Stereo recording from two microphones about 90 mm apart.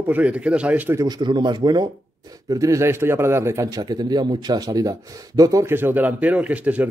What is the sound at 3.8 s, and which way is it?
Speech, 50° right (ahead or behind).